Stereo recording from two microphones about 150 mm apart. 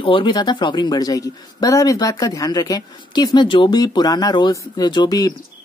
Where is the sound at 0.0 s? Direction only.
35° left (ahead or behind).